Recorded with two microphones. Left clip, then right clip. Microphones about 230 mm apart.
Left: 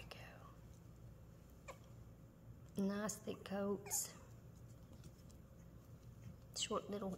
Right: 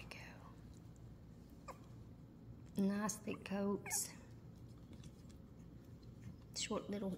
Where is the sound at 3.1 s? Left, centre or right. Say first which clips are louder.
Right 2 dB; left.